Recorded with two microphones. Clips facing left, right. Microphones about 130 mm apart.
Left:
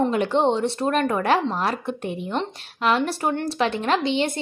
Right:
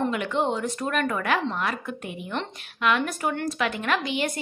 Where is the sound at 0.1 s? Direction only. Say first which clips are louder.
Left 5 dB; 35° left (ahead or behind).